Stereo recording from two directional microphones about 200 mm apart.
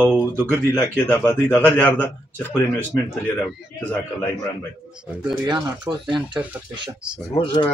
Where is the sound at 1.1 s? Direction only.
5° left (ahead or behind).